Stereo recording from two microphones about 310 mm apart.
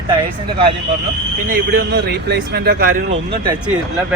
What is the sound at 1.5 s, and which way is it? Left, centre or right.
Speech, right.